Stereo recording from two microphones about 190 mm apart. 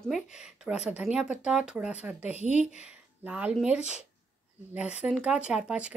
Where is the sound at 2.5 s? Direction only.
35° left (ahead or behind).